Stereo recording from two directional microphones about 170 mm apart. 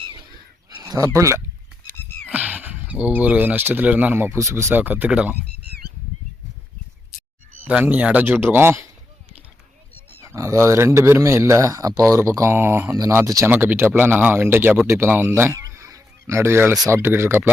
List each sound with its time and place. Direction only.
0.8 s speech: 20° right (ahead or behind)
1.9 s music: 10° left (ahead or behind)
2.3 s speech: 10° right (ahead or behind)
7.6 s speech: 10° right (ahead or behind)
10.2 s speech: 20° right (ahead or behind)